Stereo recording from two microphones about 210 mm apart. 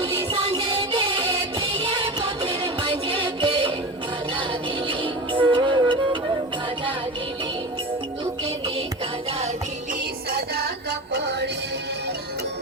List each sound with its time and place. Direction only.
0.0 s music: 25° right (ahead or behind)
4.9 s music: 25° right (ahead or behind)
10.3 s music: 50° right (ahead or behind)